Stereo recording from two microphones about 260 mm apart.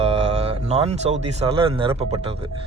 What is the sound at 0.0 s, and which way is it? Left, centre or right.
Speech, right.